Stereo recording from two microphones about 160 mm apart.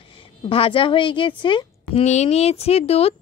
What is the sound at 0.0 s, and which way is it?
Speech, 35° left (ahead or behind).